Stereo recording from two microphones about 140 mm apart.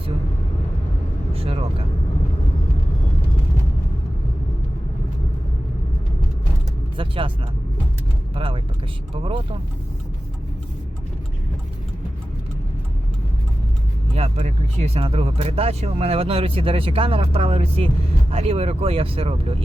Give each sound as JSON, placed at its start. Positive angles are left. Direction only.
{"t": 1.3, "sound": "vehicle", "side_deg": -45}
{"t": 6.9, "sound": "vehicle", "side_deg": -40}
{"t": 8.4, "sound": "a sound", "side_deg": -40}
{"t": 9.2, "sound": "speech", "side_deg": -40}
{"t": 14.2, "sound": "speech", "side_deg": -50}